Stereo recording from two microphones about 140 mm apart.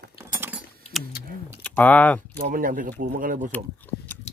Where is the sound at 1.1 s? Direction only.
90° left.